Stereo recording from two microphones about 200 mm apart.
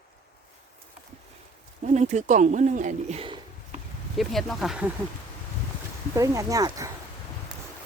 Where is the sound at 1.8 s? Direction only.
35° right (ahead or behind).